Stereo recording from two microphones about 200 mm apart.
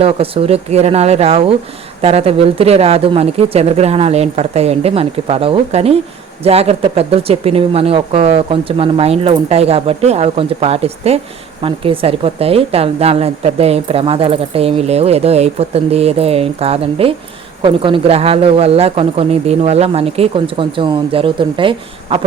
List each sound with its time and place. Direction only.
0.0 s speech: 30° right (ahead or behind)